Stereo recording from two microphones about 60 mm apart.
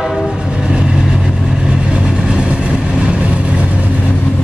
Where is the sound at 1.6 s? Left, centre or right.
Centre.